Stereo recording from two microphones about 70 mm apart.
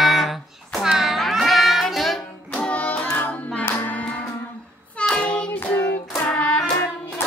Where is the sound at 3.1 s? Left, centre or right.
Left.